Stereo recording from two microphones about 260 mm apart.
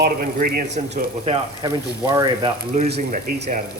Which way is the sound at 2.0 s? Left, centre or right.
Centre.